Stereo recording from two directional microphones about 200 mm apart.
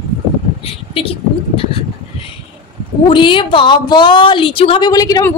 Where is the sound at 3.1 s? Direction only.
25° left (ahead or behind).